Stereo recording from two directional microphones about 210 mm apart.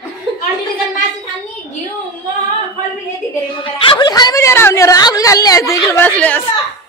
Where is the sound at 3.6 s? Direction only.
20° left (ahead or behind).